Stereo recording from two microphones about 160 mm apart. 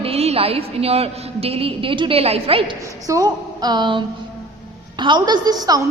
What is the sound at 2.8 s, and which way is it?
A woman's voice, 20° right (ahead or behind).